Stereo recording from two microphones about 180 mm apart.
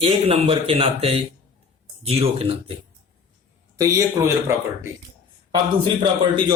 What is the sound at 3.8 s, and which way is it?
Speech, 15° right (ahead or behind).